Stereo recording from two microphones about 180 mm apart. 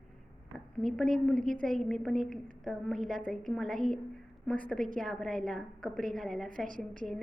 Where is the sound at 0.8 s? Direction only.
5° left (ahead or behind).